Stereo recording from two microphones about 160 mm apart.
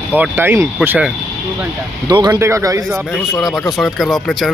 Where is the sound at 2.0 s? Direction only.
25° right (ahead or behind).